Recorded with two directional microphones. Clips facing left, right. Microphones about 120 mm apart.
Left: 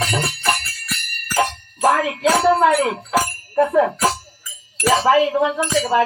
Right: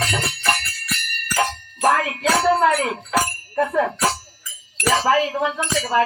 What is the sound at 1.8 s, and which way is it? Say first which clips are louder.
Speech: left 2 dB; 10° left (ahead or behind).